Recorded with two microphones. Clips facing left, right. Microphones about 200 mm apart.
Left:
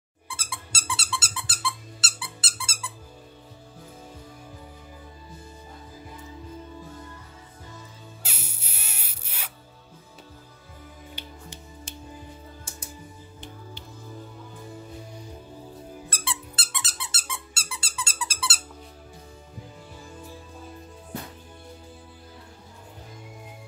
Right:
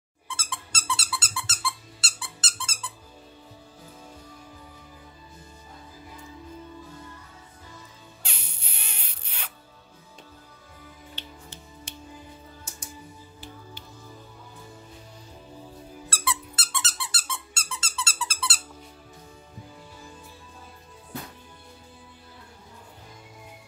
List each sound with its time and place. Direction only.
0.3 s squeak: 10° left (ahead or behind)
0.9 s dog: centre (ahead or behind)
1.6 s squeak: centre (ahead or behind)
8.2 s music: 5° left (ahead or behind)
11.2 s music: 15° left (ahead or behind)
16.1 s squeak: 30° left (ahead or behind)
16.7 s squeak: 15° left (ahead or behind)
17.3 s dog: 15° left (ahead or behind)